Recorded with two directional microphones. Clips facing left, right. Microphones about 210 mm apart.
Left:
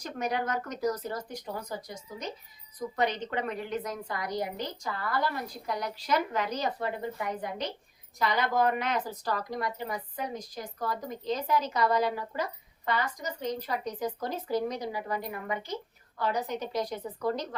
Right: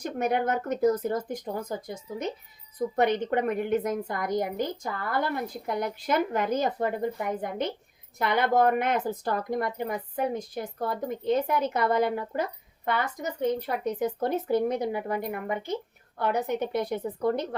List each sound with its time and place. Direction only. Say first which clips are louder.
0.0 s a woman's voice: right 5 dB; 55° right (ahead or behind)